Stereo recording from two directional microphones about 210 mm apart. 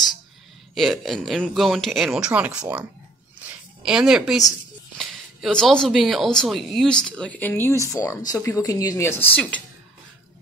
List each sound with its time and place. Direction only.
0.7 s speech: centre (ahead or behind)